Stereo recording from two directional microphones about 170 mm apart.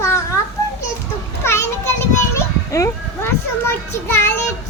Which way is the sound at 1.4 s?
15° left (ahead or behind).